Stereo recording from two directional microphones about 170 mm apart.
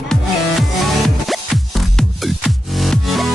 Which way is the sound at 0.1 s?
Centre (ahead or behind).